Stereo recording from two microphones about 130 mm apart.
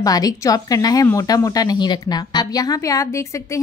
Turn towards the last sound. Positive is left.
turn(degrees=25)  # may be behind; listen again after turning